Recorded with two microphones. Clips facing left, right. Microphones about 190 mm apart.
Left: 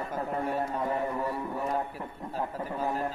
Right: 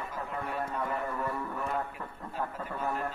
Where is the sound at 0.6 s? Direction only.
25° left (ahead or behind).